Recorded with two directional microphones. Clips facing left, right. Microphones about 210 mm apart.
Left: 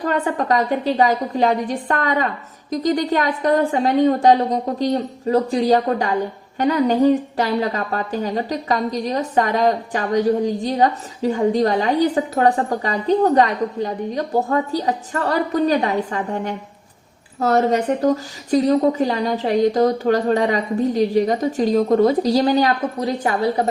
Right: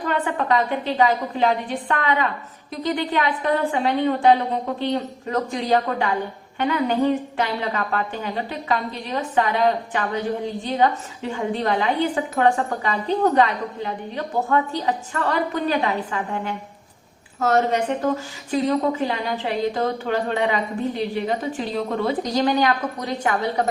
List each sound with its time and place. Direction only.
0.0 s a woman's voice: 40° left (ahead or behind)